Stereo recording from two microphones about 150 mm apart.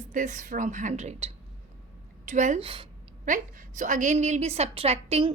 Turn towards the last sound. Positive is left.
turn(degrees=-45)  # may be behind; listen again after turning